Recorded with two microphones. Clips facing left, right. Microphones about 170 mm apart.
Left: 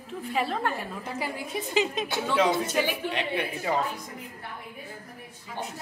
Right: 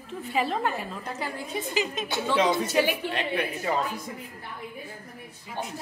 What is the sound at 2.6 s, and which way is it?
Speech, 10° right (ahead or behind).